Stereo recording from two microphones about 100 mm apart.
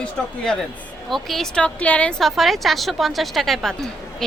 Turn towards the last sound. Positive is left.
turn(degrees=0)  # may be behind; listen again after turning